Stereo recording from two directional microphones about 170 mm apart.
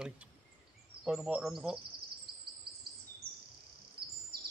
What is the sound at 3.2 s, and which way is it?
Bird, 65° right (ahead or behind).